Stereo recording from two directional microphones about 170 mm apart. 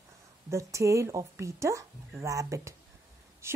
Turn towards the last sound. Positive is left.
turn(degrees=-15)  # may be behind; listen again after turning